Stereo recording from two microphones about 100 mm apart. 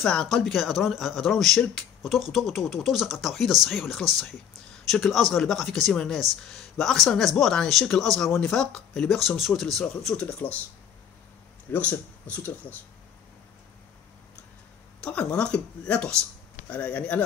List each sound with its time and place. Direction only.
0.0 s speech: 5° left (ahead or behind)
10.2 s speech: 15° left (ahead or behind)
11.7 s speech: 20° left (ahead or behind)
15.0 s speech: 10° left (ahead or behind)